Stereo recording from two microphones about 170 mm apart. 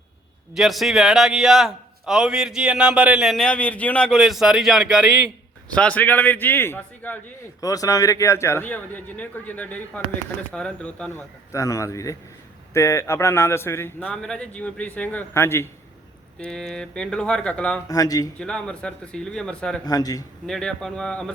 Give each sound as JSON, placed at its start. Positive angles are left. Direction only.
{"t": 0.5, "sound": "a man's voice", "side_deg": 0}
{"t": 7.6, "sound": "a man's voice", "side_deg": 20}
{"t": 11.5, "sound": "a man's voice", "side_deg": 20}
{"t": 17.8, "sound": "a man's voice", "side_deg": 20}
{"t": 18.3, "sound": "a man's voice", "side_deg": 5}
{"t": 19.8, "sound": "a man's voice", "side_deg": 20}
{"t": 20.5, "sound": "a man's voice", "side_deg": 5}